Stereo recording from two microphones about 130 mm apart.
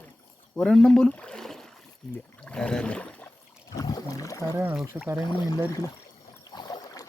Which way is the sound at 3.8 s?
25° left (ahead or behind).